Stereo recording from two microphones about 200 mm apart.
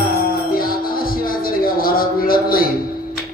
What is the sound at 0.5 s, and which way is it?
Music, 45° left (ahead or behind).